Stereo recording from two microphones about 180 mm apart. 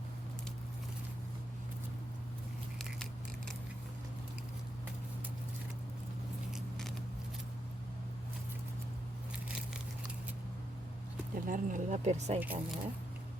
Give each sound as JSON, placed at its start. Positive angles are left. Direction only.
{"t": 6.5, "sound": "scissors", "side_deg": 0}
{"t": 11.4, "sound": "speech", "side_deg": -45}
{"t": 12.4, "sound": "speech", "side_deg": -10}